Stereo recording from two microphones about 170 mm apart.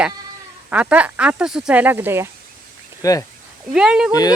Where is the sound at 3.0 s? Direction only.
20° left (ahead or behind).